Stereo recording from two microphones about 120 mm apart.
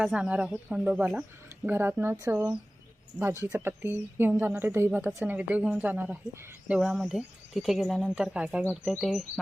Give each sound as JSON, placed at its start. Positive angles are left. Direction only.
{"t": 0.0, "sound": "a woman's voice", "side_deg": -10}
{"t": 3.4, "sound": "a woman's voice", "side_deg": -20}